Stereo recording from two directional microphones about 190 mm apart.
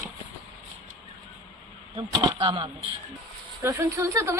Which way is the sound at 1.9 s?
20° right (ahead or behind).